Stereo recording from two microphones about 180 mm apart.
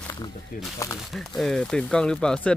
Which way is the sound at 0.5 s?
50° left (ahead or behind).